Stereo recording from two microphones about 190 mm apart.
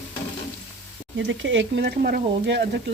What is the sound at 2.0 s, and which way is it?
Frying, 50° right (ahead or behind).